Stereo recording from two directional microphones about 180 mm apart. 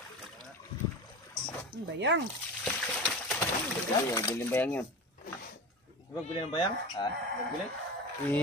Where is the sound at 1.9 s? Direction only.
90° right.